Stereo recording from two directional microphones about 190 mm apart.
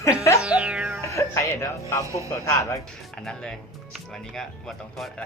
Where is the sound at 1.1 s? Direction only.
15° left (ahead or behind).